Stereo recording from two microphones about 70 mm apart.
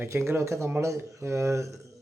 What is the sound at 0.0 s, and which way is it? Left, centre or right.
Speech, right.